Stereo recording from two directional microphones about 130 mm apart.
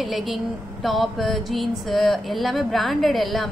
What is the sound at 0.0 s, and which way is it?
A woman's voice, centre (ahead or behind).